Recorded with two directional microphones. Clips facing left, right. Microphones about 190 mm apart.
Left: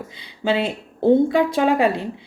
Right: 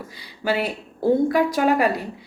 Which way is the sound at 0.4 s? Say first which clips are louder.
Left 2 dB; 25° left (ahead or behind).